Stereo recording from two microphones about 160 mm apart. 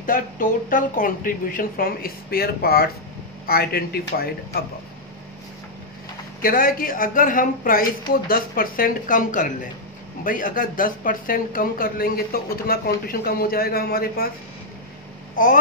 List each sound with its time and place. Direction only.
0.0 s a woman's voice: 60° left (ahead or behind)
6.4 s a woman's voice: 60° left (ahead or behind)
15.3 s speech: 55° left (ahead or behind)